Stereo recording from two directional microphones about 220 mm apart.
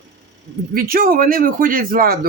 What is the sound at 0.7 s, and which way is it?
Speech, 40° right (ahead or behind).